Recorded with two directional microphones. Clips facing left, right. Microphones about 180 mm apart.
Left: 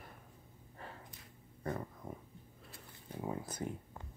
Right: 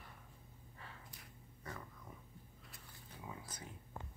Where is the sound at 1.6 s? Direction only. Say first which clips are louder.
Left 11 dB; 50° left (ahead or behind).